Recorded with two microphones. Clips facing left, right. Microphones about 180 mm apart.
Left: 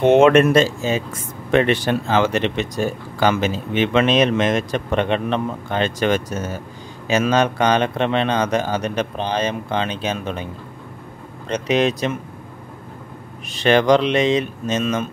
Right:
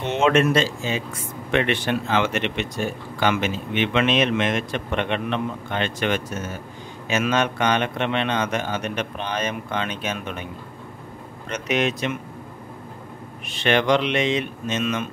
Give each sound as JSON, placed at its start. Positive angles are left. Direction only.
{"t": 0.0, "sound": "speech", "side_deg": 55}
{"t": 13.5, "sound": "speech", "side_deg": 40}